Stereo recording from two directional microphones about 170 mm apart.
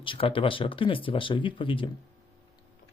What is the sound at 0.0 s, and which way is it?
Speech, 30° left (ahead or behind).